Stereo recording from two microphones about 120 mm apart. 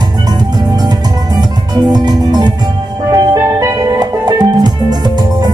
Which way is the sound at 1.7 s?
35° right (ahead or behind).